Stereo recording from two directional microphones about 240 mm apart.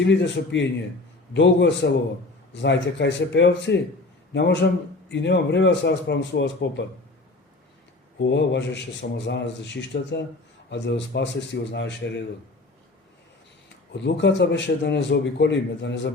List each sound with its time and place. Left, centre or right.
0.0 s a man's voice: left
8.2 s a man's voice: left
13.9 s a man's voice: left